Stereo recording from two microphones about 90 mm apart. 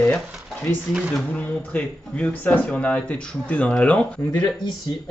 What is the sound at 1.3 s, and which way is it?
Speech, 15° left (ahead or behind).